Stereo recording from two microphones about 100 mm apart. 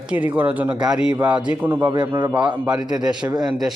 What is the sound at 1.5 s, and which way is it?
Speech, 20° right (ahead or behind).